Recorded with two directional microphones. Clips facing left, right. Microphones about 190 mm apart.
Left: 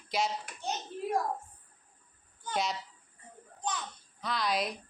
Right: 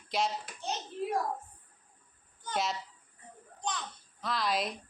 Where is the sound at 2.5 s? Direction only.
Centre (ahead or behind).